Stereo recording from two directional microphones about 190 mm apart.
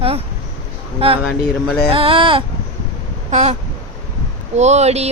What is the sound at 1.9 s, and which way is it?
Speech, 30° right (ahead or behind).